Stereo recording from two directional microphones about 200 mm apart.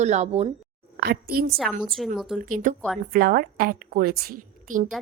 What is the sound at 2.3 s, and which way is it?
A woman's voice, 40° right (ahead or behind).